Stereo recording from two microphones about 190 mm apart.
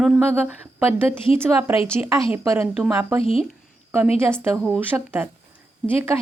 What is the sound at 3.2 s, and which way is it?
Speech, 30° left (ahead or behind).